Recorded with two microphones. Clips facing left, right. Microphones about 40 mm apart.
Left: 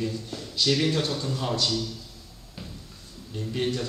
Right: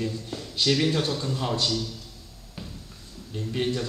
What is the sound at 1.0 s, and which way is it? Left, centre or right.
Speech, centre.